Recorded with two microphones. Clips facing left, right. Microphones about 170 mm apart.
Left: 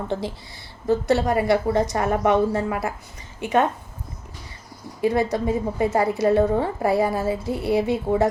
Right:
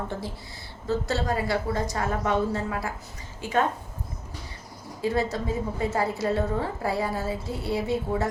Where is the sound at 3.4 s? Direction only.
70° left (ahead or behind).